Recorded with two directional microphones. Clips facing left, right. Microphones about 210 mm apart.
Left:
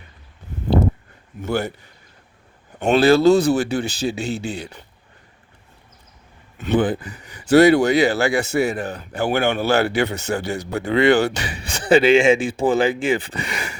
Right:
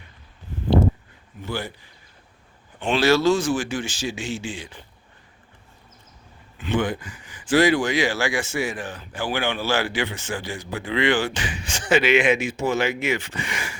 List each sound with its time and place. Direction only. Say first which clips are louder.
2.7 s speech: left 5 dB; 40° left (ahead or behind)
6.7 s speech: left 5 dB; 35° left (ahead or behind)